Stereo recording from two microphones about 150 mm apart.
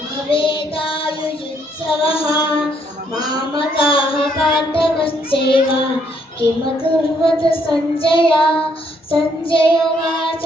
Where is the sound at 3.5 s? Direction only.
35° left (ahead or behind).